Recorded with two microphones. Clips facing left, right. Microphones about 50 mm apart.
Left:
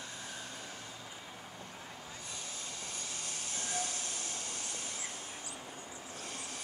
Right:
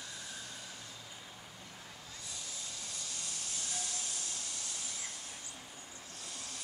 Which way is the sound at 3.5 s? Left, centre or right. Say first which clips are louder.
Left 7 dB; left.